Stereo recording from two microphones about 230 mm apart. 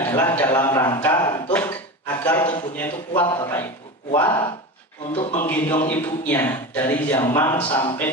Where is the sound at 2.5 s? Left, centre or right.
Centre.